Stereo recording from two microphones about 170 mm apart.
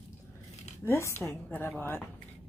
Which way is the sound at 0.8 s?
15° left (ahead or behind).